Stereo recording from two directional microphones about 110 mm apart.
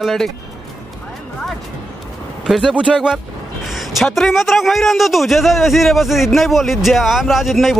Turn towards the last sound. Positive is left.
turn(degrees=-5)  # may be behind; listen again after turning